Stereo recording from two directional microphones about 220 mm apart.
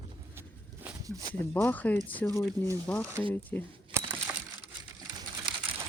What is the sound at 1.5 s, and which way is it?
Speech, 10° left (ahead or behind).